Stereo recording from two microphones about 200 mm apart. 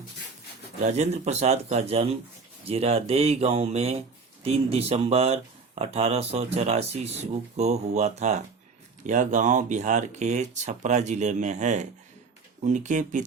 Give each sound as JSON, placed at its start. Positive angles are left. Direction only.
{"t": 0.9, "sound": "speech", "side_deg": -35}